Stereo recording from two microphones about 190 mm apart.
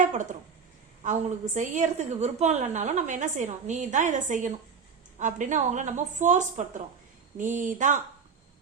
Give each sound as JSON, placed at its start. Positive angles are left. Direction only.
{"t": 0.0, "sound": "speech", "side_deg": -40}
{"t": 1.5, "sound": "a woman's voice", "side_deg": -40}